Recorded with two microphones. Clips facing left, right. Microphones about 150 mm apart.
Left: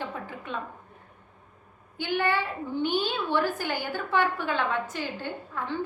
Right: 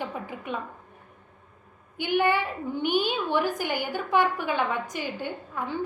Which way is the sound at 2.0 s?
15° right (ahead or behind).